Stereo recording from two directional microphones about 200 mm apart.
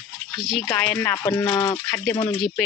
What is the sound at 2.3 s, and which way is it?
Speech, centre (ahead or behind).